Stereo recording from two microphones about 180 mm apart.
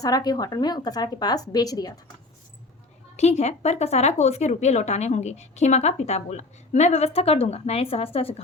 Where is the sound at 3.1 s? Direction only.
35° left (ahead or behind).